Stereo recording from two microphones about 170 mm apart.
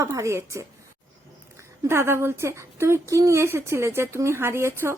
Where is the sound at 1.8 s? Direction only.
15° right (ahead or behind).